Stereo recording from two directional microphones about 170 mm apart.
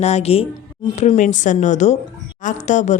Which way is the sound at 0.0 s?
40° left (ahead or behind).